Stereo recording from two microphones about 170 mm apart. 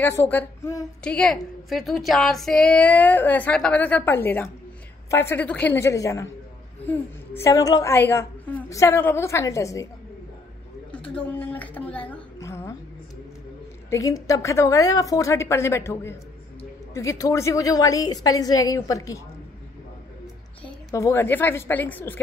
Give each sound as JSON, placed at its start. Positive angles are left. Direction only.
{"t": 0.0, "sound": "a woman's voice", "side_deg": 10}
{"t": 10.9, "sound": "a woman's voice", "side_deg": 10}
{"t": 12.4, "sound": "a sound", "side_deg": 15}
{"t": 13.8, "sound": "a woman's voice", "side_deg": 20}
{"t": 20.9, "sound": "a woman's voice", "side_deg": 15}